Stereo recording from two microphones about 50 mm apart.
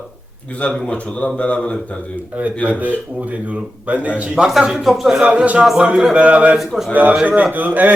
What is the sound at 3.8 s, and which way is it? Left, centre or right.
Speech, right.